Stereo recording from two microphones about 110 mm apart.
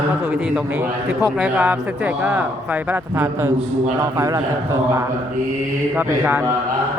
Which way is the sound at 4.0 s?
30° right (ahead or behind).